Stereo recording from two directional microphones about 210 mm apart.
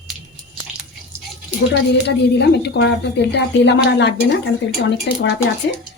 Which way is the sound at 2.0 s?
55° left (ahead or behind).